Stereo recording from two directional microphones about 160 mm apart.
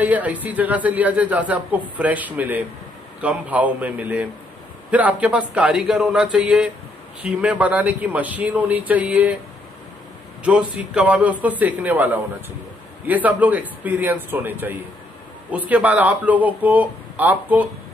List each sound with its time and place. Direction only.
0.0 s speech: 10° right (ahead or behind)
10.4 s speech: 5° right (ahead or behind)